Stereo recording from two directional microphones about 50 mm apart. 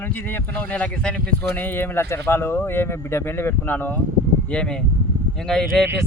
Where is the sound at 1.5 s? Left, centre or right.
Left.